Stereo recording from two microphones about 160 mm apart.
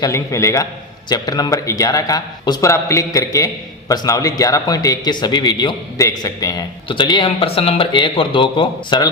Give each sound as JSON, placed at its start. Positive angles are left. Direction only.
{"t": 0.0, "sound": "a man's voice", "side_deg": 20}